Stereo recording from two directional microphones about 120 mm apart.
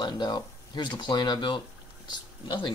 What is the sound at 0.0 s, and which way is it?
Speech, 40° left (ahead or behind).